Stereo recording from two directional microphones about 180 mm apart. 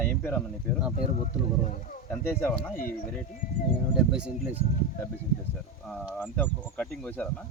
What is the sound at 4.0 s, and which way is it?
Speech, 5° right (ahead or behind).